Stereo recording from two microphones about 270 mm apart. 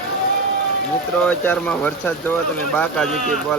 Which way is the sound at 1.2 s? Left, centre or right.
Centre.